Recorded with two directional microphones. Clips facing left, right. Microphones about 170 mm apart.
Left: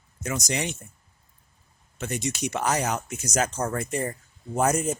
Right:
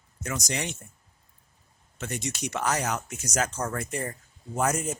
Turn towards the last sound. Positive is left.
turn(degrees=30)  # may be behind; listen again after turning